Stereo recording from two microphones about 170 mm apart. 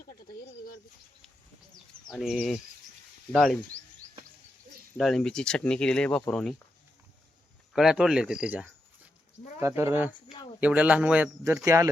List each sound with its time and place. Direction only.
0.0 s a sound: 60° left (ahead or behind)
2.0 s speech: centre (ahead or behind)
4.9 s speech: centre (ahead or behind)
7.7 s speech: 5° right (ahead or behind); by 11.9 s 20° right (ahead or behind)